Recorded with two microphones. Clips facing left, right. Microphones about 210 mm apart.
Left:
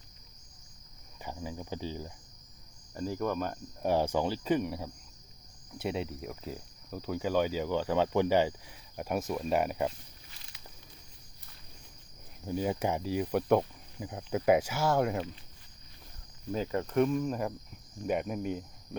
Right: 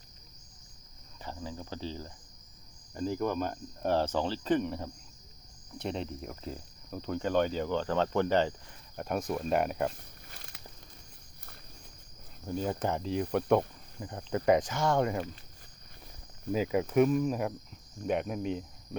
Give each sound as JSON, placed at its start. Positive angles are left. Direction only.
{"t": 1.2, "sound": "cricket", "side_deg": 10}
{"t": 3.1, "sound": "cricket", "side_deg": 0}
{"t": 3.8, "sound": "speech", "side_deg": 10}
{"t": 9.0, "sound": "cricket", "side_deg": 5}
{"t": 9.9, "sound": "snake", "side_deg": -55}
{"t": 12.5, "sound": "cricket", "side_deg": 10}
{"t": 16.5, "sound": "cricket", "side_deg": -10}
{"t": 18.9, "sound": "speech", "side_deg": 0}